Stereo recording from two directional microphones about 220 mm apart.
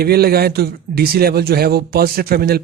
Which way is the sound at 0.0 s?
45° right (ahead or behind).